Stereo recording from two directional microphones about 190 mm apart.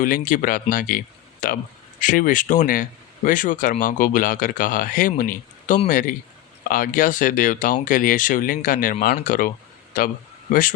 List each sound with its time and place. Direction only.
0.3 s speech: 45° left (ahead or behind)